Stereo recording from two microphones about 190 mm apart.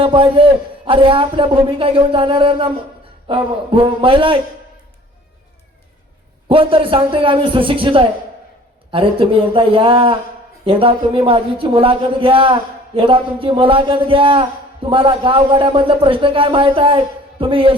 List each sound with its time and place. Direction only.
0.0 s a man's voice: 25° right (ahead or behind)
6.5 s speech: 30° right (ahead or behind)